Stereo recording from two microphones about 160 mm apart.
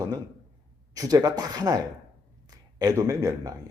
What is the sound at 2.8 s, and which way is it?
Speech, 20° right (ahead or behind).